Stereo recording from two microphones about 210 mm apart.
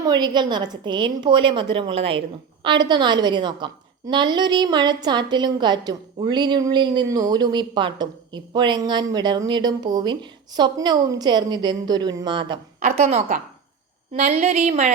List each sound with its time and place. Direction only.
0.0 s a woman's voice: 20° right (ahead or behind)
12.8 s speech: 35° right (ahead or behind)